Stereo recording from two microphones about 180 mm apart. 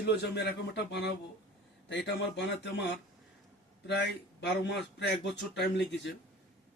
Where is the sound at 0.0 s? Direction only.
70° left (ahead or behind).